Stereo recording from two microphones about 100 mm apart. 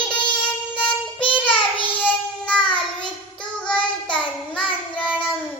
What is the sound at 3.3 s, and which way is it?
Child singing, 10° left (ahead or behind).